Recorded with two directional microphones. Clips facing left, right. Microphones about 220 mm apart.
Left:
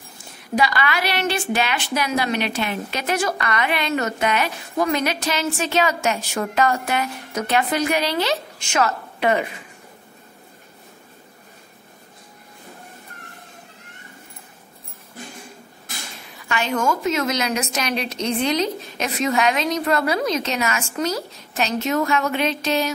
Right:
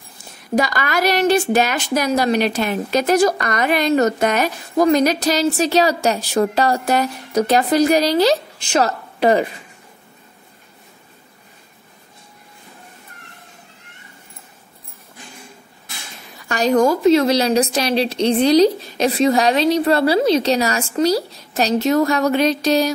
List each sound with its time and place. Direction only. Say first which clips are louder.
0.6 s a woman's voice: right 3 dB; 45° right (ahead or behind)
16.4 s a woman's voice: right 7 dB; 40° right (ahead or behind)